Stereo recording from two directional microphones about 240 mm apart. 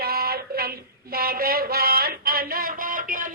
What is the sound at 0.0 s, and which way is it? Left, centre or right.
Child singing, right.